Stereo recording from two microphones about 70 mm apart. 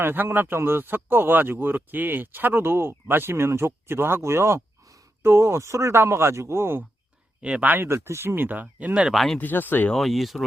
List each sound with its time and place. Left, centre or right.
0.0 s speech: right
7.4 s speech: right
7.9 s speech: right
8.6 s speech: centre
9.0 s speech: centre
9.4 s speech: left
9.9 s speech: centre